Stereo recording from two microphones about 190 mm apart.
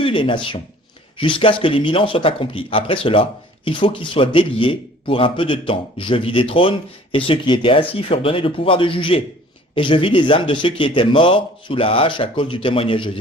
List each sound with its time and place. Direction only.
0.0 s speech: 25° left (ahead or behind)